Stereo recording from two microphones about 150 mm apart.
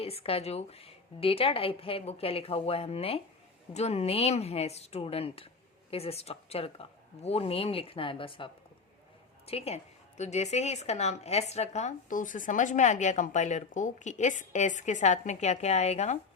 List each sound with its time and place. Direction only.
0.0 s a woman's voice: 40° left (ahead or behind)
9.5 s a woman's voice: 45° left (ahead or behind)